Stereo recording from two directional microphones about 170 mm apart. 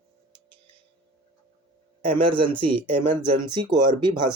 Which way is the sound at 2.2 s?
30° right (ahead or behind).